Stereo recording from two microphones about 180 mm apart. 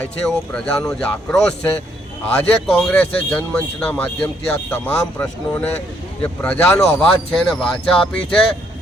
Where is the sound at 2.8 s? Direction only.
10° left (ahead or behind).